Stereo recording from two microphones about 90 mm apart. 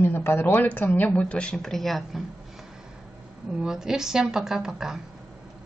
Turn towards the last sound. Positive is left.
turn(degrees=-5)  # may be behind; listen again after turning